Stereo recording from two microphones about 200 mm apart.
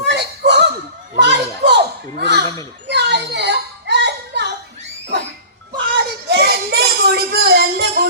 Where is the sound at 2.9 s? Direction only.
55° right (ahead or behind).